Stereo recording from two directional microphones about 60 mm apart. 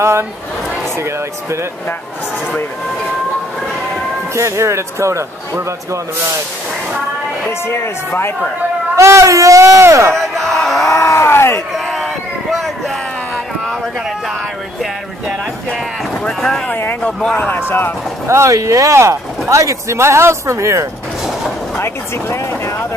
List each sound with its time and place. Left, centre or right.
0.0 s speech: right
4.4 s speech: right
7.6 s speech: left
8.9 s speech: right
10.3 s a sound: centre
10.9 s a sound: left
11.7 s a sound: centre
16.3 s speech: centre
17.5 s speech: left
18.2 s speech: right
18.5 s speech: right
21.7 s speech: left